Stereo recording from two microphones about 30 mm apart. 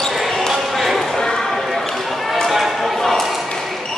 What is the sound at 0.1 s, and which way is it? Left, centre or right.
Basketball bounce, centre.